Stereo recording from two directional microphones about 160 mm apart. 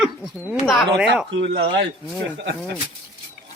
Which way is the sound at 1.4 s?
90° right.